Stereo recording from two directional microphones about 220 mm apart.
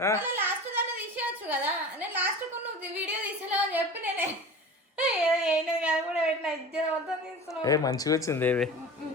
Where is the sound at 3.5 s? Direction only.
10° right (ahead or behind).